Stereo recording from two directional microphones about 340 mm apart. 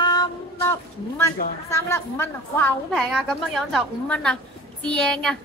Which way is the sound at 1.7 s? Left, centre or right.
Centre.